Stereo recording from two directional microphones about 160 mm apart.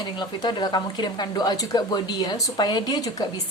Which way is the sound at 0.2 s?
25° left (ahead or behind).